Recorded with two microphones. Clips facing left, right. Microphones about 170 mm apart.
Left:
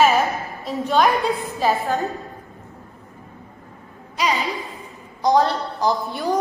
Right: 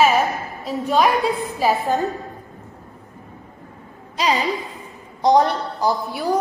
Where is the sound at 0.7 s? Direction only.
5° right (ahead or behind).